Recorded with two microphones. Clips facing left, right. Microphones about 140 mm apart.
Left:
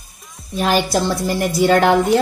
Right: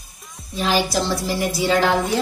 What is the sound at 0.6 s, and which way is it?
A woman's voice, 50° left (ahead or behind).